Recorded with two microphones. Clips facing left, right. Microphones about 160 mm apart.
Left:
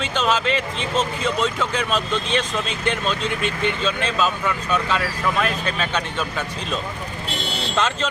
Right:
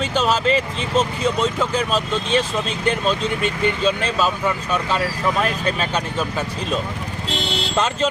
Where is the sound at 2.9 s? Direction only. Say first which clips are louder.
Right 4 dB; 40° right (ahead or behind).